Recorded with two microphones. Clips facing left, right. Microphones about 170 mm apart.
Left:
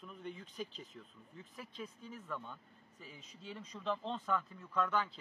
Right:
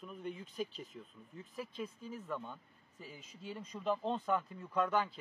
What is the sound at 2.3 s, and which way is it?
Speech, 10° right (ahead or behind).